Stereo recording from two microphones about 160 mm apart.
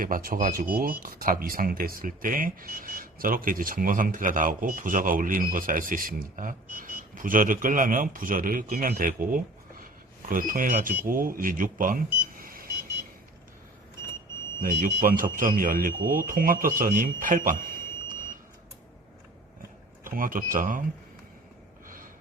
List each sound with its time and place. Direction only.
0.0 s speech: 60° right (ahead or behind)
14.6 s speech: 55° right (ahead or behind)
20.1 s speech: 60° right (ahead or behind)
21.8 s snort: 60° right (ahead or behind)